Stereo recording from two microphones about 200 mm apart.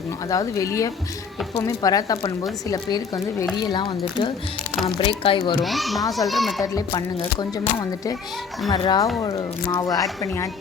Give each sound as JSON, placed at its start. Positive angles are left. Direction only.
{"t": 0.3, "sound": "speech", "side_deg": 15}
{"t": 5.6, "sound": "a child's voice", "side_deg": 0}
{"t": 6.7, "sound": "speech", "side_deg": 20}